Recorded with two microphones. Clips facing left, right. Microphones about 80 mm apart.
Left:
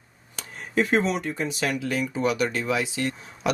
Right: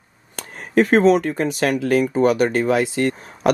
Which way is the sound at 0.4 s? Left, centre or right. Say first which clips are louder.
Right 7 dB; right.